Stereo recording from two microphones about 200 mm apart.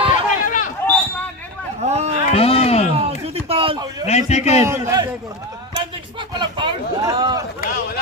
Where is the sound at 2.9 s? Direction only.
30° right (ahead or behind).